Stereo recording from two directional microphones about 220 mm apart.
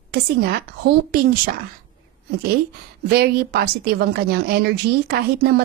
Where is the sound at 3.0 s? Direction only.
45° right (ahead or behind).